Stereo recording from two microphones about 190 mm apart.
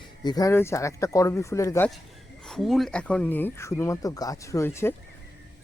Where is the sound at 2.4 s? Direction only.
Centre (ahead or behind).